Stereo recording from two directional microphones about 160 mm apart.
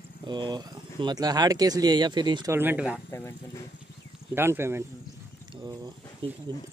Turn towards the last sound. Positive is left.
turn(degrees=-35)  # may be behind; listen again after turning